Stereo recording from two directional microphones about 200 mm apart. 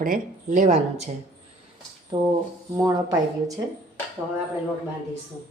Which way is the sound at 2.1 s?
20° right (ahead or behind).